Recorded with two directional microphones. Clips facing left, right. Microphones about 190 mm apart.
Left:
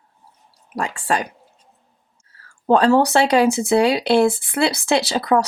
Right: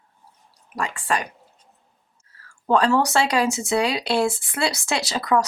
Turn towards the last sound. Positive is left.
turn(degrees=30)  # may be behind; listen again after turning